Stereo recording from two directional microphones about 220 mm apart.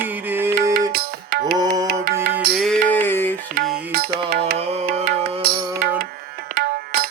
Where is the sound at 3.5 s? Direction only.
45° right (ahead or behind).